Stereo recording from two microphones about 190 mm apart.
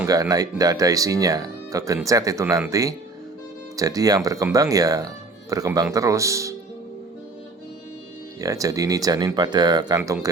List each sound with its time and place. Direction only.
0.0 s speech: 20° right (ahead or behind)
8.4 s speech: 15° right (ahead or behind)
10.0 s speech: 10° right (ahead or behind)